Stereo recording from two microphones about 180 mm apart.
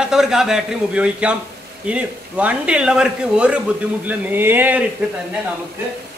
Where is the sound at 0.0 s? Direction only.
5° right (ahead or behind).